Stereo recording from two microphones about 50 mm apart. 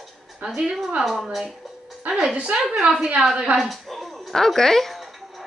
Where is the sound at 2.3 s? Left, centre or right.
Centre.